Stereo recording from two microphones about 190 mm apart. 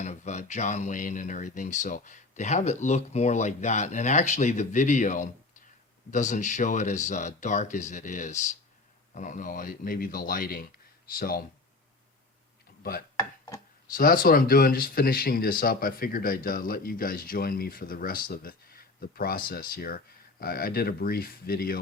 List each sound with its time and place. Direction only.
0.0 s speech: 40° left (ahead or behind)
12.8 s speech: 50° left (ahead or behind)
13.1 s chopping: 20° left (ahead or behind)
13.9 s speech: 45° left (ahead or behind)